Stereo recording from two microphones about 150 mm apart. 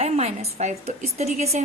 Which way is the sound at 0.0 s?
50° right (ahead or behind).